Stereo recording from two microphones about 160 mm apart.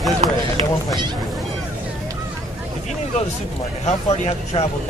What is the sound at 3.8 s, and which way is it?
Speech, 40° left (ahead or behind).